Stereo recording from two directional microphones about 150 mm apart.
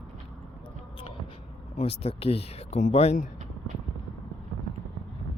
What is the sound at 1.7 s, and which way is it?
Speech, 40° left (ahead or behind).